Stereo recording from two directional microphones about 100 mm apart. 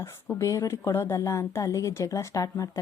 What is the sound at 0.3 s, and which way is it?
A woman's voice, 30° left (ahead or behind).